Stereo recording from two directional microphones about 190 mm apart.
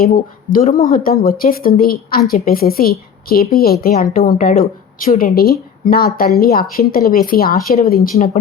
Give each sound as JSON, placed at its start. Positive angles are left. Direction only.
{"t": 0.0, "sound": "a woman's voice", "side_deg": 50}